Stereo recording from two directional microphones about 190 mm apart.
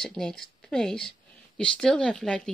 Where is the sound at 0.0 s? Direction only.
5° left (ahead or behind).